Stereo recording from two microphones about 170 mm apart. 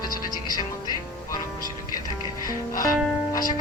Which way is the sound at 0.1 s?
25° left (ahead or behind).